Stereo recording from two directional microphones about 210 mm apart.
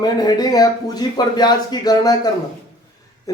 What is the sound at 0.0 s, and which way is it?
A man's voice, 20° left (ahead or behind).